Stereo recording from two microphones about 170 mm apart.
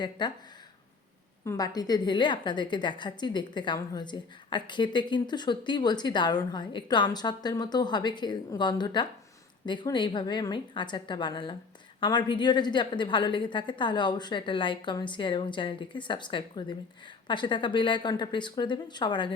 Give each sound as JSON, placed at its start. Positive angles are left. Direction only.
{"t": 0.0, "sound": "a woman's voice", "side_deg": 25}
{"t": 1.5, "sound": "a woman's voice", "side_deg": 20}